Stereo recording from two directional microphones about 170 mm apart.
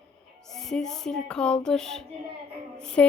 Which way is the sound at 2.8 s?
5° left (ahead or behind).